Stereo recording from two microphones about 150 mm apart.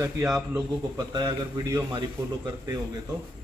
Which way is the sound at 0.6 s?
25° right (ahead or behind).